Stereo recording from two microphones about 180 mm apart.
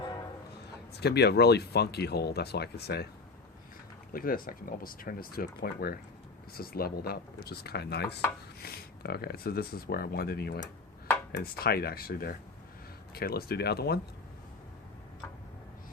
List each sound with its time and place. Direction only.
0.9 s speech: 65° left (ahead or behind)
4.1 s speech: 50° left (ahead or behind)